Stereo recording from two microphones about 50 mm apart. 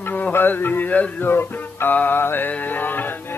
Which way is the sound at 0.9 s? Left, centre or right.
Left.